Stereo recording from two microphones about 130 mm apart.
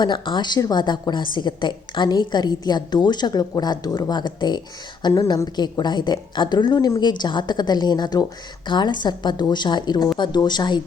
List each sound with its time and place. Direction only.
0.0 s a woman's voice: 35° left (ahead or behind)